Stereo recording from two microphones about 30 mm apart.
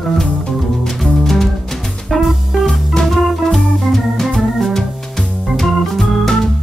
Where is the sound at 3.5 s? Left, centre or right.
Centre.